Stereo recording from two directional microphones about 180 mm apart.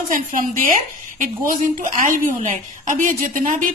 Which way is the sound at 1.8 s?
45° right (ahead or behind).